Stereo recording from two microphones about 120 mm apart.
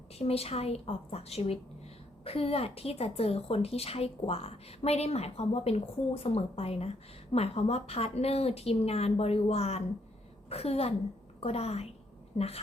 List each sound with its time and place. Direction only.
0.2 s speech: 55° left (ahead or behind)